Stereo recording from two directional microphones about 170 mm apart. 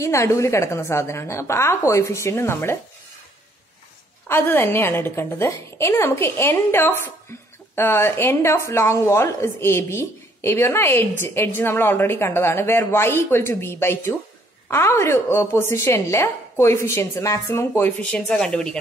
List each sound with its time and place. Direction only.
0.0 s a woman's voice: 15° left (ahead or behind)
4.3 s a woman's voice: 10° left (ahead or behind)